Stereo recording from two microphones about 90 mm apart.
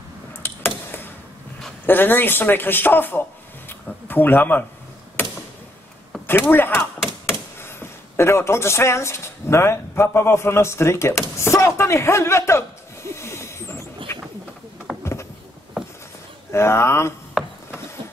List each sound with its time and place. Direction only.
0.4 s a sound: 25° left (ahead or behind)
1.9 s a man's voice: 20° left (ahead or behind)
6.1 s chop: 5° left (ahead or behind)
6.5 s speech: 25° left (ahead or behind)
14.1 s bird: 30° left (ahead or behind)
14.9 s a sound: 5° right (ahead or behind)
16.5 s speech: 30° left (ahead or behind)
17.4 s rub: 5° right (ahead or behind)